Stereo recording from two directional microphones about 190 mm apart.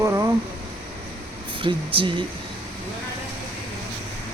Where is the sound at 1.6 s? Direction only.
25° right (ahead or behind).